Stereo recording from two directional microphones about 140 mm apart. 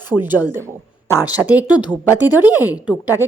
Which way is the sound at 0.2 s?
15° right (ahead or behind).